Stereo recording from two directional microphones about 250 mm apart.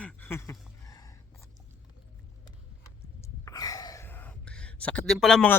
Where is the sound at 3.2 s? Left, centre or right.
Centre.